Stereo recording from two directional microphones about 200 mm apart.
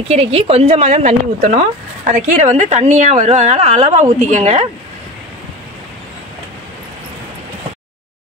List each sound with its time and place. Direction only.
0.1 s a woman's voice: 30° right (ahead or behind)